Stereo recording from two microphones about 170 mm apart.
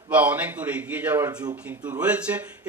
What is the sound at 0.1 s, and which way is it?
Speech, 10° right (ahead or behind).